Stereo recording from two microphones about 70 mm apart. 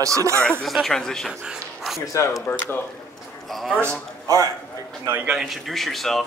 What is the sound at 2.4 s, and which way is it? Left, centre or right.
Speech, left.